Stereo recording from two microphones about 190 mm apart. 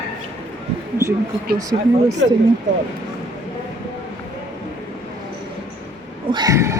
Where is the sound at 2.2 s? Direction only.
90° right.